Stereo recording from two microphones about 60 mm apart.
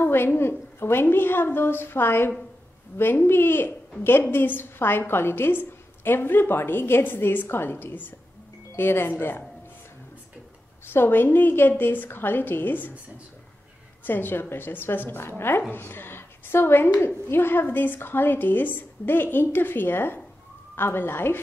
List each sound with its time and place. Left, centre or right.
0.0 s a woman's voice: left
10.9 s a woman's voice: left
14.0 s a woman's voice: left